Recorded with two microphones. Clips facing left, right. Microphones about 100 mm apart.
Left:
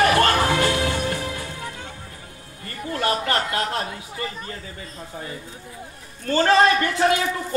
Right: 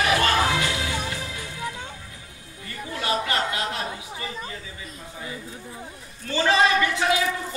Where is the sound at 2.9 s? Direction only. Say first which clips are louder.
Left 3 dB; 50° left (ahead or behind).